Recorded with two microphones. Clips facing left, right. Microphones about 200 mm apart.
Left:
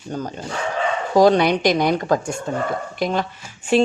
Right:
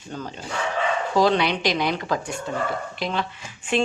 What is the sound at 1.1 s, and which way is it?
Speech, 45° left (ahead or behind).